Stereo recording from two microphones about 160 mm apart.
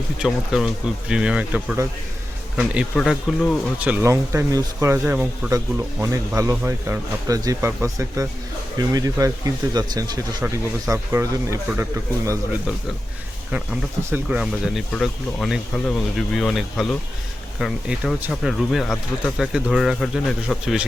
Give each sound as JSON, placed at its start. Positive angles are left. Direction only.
{"t": 0.2, "sound": "speech", "side_deg": -5}
{"t": 2.6, "sound": "speech", "side_deg": 0}
{"t": 3.8, "sound": "a man's voice", "side_deg": -15}
{"t": 14.0, "sound": "speech", "side_deg": -10}